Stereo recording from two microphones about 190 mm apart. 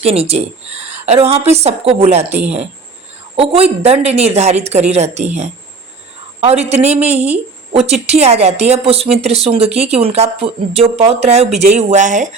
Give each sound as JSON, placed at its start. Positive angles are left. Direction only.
{"t": 0.0, "sound": "a woman's voice", "side_deg": -35}